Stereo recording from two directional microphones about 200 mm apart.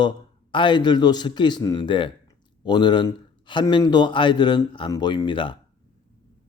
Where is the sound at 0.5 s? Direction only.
25° left (ahead or behind).